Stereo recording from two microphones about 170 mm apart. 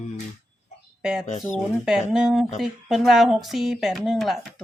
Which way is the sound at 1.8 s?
5° right (ahead or behind).